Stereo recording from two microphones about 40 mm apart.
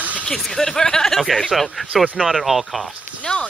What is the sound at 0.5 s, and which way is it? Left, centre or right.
Speech, centre.